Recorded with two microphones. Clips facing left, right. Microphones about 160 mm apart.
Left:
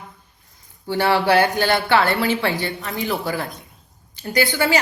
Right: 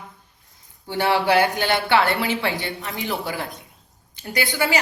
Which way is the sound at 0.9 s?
20° right (ahead or behind).